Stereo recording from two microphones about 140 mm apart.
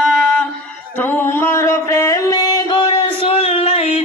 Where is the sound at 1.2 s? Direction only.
15° left (ahead or behind).